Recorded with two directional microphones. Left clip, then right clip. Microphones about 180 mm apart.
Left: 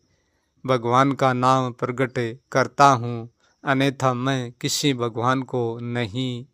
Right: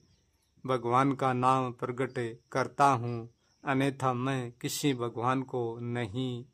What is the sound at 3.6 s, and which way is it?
Speech, 25° left (ahead or behind).